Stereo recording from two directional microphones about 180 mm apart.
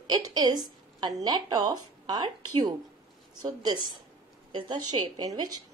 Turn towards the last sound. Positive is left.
turn(degrees=-20)  # may be behind; listen again after turning